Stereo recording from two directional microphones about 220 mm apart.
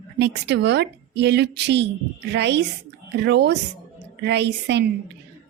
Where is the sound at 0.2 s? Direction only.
50° right (ahead or behind).